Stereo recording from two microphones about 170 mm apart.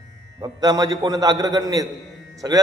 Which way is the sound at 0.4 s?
20° right (ahead or behind).